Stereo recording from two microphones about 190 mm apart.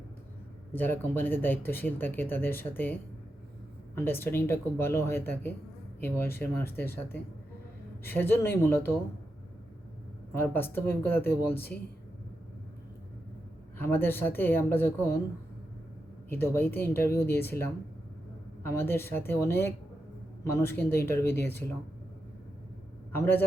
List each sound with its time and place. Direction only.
0.7 s speech: 10° left (ahead or behind)
10.3 s speech: 10° left (ahead or behind)
13.7 s speech: 10° left (ahead or behind)
16.3 s speech: 10° left (ahead or behind)
23.1 s speech: 10° left (ahead or behind)